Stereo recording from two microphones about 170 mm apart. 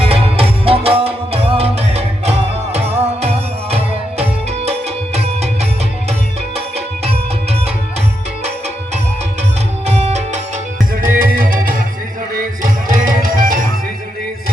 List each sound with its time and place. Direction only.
0.0 s music: 35° right (ahead or behind)
5.1 s music: 40° right (ahead or behind)
9.8 s music: 40° right (ahead or behind)
11.0 s music: 60° right (ahead or behind)